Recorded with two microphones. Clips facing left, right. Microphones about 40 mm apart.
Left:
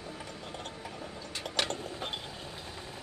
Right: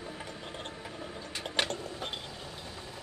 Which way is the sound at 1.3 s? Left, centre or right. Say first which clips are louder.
Right 1 dB; right.